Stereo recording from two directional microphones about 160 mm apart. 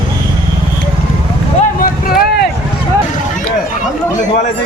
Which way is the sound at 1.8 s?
70° left (ahead or behind).